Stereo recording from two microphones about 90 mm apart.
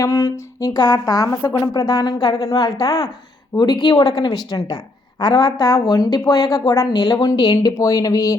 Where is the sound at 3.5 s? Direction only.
50° left (ahead or behind).